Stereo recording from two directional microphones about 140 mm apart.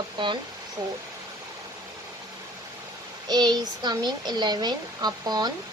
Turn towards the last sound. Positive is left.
turn(degrees=-30)  # may be behind; listen again after turning